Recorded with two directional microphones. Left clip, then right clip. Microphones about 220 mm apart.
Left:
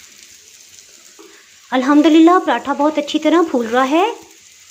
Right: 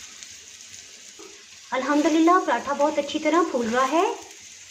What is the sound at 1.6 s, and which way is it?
Speech, 45° left (ahead or behind).